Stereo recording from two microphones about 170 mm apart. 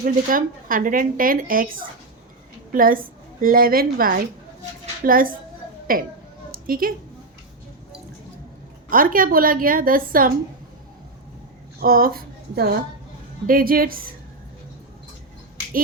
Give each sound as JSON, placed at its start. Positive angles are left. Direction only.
{"t": 0.0, "sound": "a woman's voice", "side_deg": -55}
{"t": 6.5, "sound": "a sound", "side_deg": -60}
{"t": 8.9, "sound": "a woman's voice", "side_deg": -55}
{"t": 11.8, "sound": "a woman's voice", "side_deg": -60}